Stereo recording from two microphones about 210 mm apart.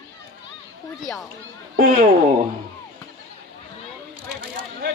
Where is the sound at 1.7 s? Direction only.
40° right (ahead or behind).